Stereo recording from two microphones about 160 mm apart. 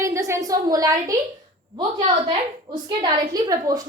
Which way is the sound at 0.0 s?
20° right (ahead or behind).